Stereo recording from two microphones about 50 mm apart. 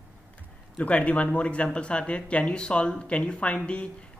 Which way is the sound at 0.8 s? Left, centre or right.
Left.